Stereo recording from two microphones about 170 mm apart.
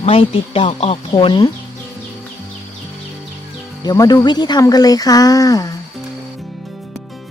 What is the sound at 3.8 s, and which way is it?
Speech, 25° left (ahead or behind).